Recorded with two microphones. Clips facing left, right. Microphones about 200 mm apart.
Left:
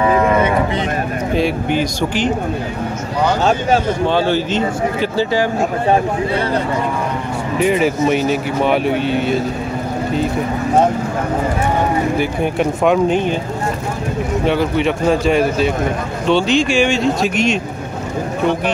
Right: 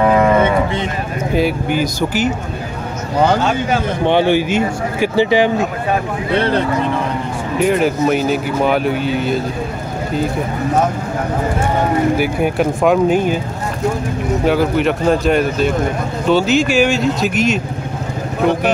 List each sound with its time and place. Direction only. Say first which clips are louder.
1.3 s speech: right 1 dB; 5° right (ahead or behind)
4.0 s a man's voice: right 2 dB; 20° right (ahead or behind)
7.5 s speech: right 1 dB; centre (ahead or behind)
12.2 s speech: right 1 dB; 5° right (ahead or behind)
14.4 s speech: right 2 dB; centre (ahead or behind)